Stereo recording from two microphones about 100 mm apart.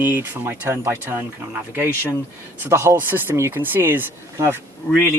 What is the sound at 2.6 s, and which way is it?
Speech, 30° right (ahead or behind).